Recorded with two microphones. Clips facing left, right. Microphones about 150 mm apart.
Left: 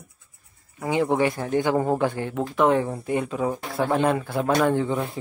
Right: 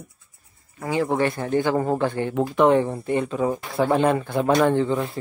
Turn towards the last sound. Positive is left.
turn(degrees=0)  # may be behind; listen again after turning